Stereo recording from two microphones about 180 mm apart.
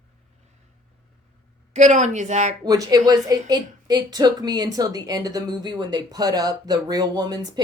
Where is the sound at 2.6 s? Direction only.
20° right (ahead or behind).